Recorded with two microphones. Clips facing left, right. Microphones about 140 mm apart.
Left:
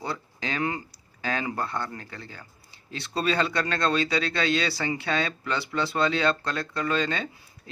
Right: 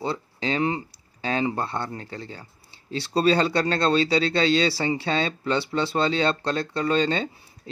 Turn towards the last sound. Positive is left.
turn(degrees=-30)  # may be behind; listen again after turning